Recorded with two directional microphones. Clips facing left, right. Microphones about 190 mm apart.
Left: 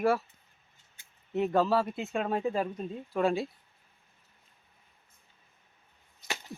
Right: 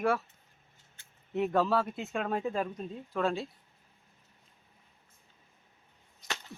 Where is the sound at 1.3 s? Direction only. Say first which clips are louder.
Left 2 dB; centre (ahead or behind).